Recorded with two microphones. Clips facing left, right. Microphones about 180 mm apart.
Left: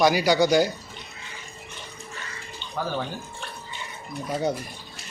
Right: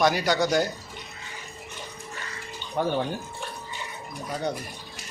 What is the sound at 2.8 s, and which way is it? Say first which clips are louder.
Speech: right 4 dB; 25° right (ahead or behind).